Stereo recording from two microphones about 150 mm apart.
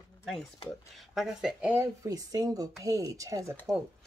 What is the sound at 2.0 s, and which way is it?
Speech, 25° right (ahead or behind).